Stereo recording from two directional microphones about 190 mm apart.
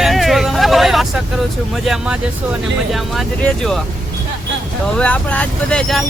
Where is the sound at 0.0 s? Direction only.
Centre (ahead or behind).